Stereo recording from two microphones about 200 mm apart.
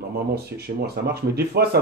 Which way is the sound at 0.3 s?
55° right (ahead or behind).